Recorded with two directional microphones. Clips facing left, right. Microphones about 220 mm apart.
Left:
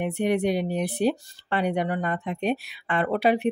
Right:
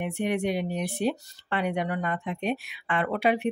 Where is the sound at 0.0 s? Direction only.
35° left (ahead or behind).